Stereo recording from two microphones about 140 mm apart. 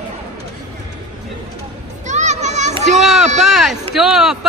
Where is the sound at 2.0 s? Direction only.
55° right (ahead or behind).